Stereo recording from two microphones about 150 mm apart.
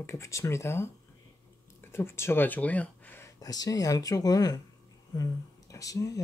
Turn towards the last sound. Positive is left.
turn(degrees=25)  # may be behind; listen again after turning